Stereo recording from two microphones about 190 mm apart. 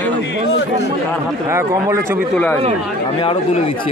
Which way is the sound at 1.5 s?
15° right (ahead or behind).